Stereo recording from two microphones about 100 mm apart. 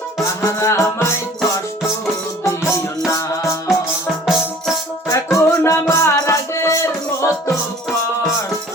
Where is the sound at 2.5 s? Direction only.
30° left (ahead or behind).